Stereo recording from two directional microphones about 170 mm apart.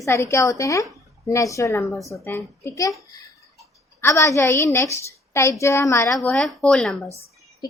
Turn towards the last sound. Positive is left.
turn(degrees=0)  # may be behind; listen again after turning